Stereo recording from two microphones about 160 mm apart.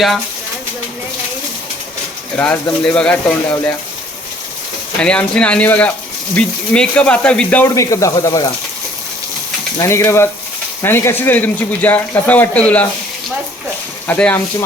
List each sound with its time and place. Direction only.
2.3 s speech: 5° left (ahead or behind)
4.9 s speech: 5° left (ahead or behind)
7.8 s speech: 20° left (ahead or behind)
9.7 s speech: 20° left (ahead or behind)
14.1 s speech: 10° left (ahead or behind)